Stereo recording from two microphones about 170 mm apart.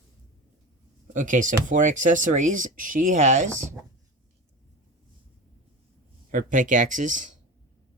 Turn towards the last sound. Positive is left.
turn(degrees=-45)  # may be behind; listen again after turning